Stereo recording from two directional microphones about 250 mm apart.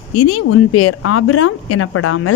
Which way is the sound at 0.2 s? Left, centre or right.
Left.